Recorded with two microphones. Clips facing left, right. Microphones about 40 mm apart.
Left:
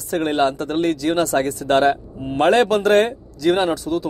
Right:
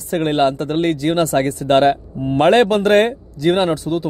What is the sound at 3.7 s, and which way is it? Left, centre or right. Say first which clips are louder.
Speech: right 2 dB; right.